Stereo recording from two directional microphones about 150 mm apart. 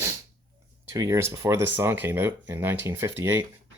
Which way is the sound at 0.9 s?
20° right (ahead or behind).